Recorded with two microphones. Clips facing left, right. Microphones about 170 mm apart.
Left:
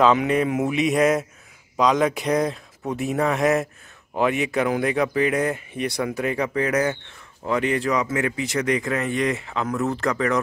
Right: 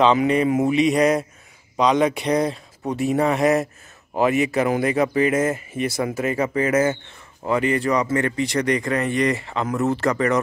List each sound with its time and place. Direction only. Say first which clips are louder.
0.0 s speech: right 1 dB; centre (ahead or behind)